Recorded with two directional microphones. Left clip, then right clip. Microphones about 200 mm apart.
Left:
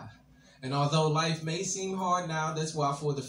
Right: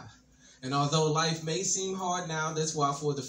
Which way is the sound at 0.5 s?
20° left (ahead or behind).